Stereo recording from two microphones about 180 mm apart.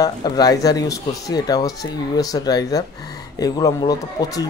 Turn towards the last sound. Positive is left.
turn(degrees=20)  # may be behind; listen again after turning